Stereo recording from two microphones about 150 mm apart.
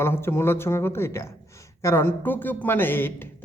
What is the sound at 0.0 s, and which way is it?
Speech, 15° left (ahead or behind).